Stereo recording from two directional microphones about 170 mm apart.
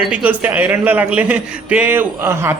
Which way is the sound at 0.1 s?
10° right (ahead or behind).